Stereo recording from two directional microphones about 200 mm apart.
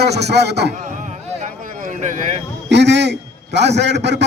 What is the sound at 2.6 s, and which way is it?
A man's voice, 60° right (ahead or behind).